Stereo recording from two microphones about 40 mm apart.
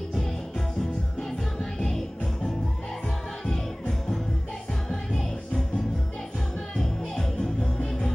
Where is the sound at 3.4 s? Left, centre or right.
Centre.